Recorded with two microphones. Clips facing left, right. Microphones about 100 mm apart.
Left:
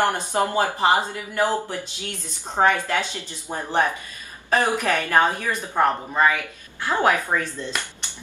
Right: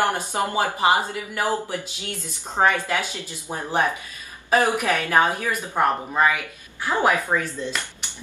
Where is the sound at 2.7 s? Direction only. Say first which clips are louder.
Left 1 dB; 15° right (ahead or behind).